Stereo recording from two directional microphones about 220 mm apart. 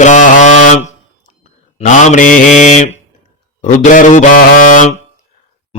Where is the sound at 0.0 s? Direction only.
35° left (ahead or behind).